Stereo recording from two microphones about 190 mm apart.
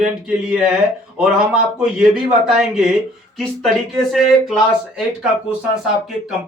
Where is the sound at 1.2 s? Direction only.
5° right (ahead or behind).